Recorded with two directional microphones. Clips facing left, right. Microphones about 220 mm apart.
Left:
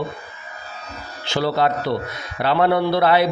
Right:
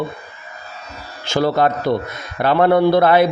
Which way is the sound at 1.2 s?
45° right (ahead or behind).